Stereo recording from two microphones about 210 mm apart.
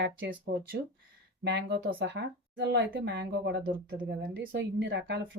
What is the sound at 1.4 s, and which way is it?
Speech, 55° right (ahead or behind).